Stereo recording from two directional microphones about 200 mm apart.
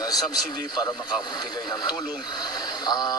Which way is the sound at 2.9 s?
20° left (ahead or behind).